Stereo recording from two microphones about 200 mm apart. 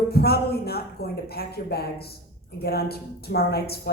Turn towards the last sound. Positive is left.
turn(degrees=50)  # may be behind; listen again after turning